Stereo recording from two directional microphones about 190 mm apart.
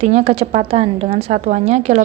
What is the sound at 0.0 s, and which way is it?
A woman's voice, 35° right (ahead or behind).